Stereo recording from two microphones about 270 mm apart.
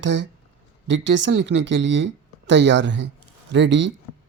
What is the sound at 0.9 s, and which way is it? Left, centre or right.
Speech, right.